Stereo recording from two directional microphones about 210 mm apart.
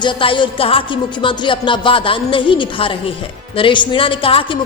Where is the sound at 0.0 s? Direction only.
25° left (ahead or behind).